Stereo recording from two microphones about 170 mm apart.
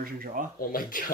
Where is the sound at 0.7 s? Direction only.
55° left (ahead or behind).